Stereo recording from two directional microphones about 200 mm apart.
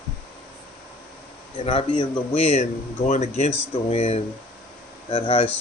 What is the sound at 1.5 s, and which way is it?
A man's voice, 25° left (ahead or behind).